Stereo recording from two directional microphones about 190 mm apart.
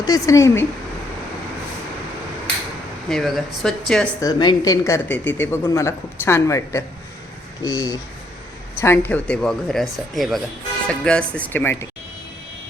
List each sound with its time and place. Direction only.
0.0 s speech: 20° left (ahead or behind)
3.1 s speech: centre (ahead or behind)
4.2 s speech: 20° left (ahead or behind)